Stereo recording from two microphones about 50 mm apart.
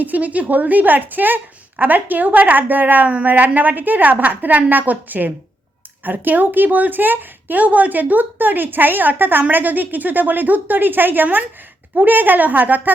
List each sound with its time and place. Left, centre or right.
0.0 s a woman's voice: right